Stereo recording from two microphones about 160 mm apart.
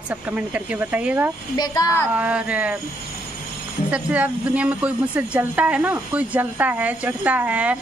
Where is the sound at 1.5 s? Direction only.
25° left (ahead or behind).